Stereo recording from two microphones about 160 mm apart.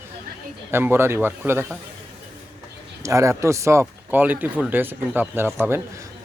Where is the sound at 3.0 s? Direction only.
20° right (ahead or behind).